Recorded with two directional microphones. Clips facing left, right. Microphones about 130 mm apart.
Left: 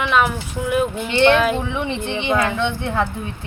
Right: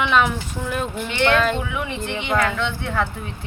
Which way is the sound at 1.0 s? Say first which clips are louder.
Left 3 dB; 25° left (ahead or behind).